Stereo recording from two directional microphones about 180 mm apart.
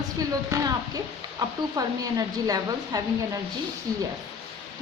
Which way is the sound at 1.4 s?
20° right (ahead or behind).